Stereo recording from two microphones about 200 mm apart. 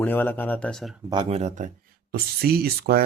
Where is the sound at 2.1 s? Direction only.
50° right (ahead or behind).